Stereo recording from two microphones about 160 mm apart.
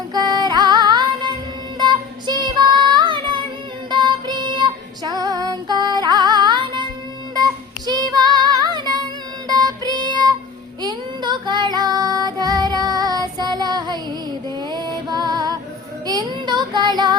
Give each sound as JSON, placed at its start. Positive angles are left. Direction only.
{"t": 0.1, "sound": "music", "side_deg": -25}
{"t": 1.8, "sound": "child singing", "side_deg": -30}
{"t": 3.8, "sound": "female singing", "side_deg": -30}
{"t": 7.3, "sound": "child singing", "side_deg": -25}
{"t": 9.5, "sound": "music", "side_deg": -25}
{"t": 10.8, "sound": "child singing", "side_deg": -30}
{"t": 14.7, "sound": "music", "side_deg": -25}
{"t": 16.0, "sound": "child singing", "side_deg": -25}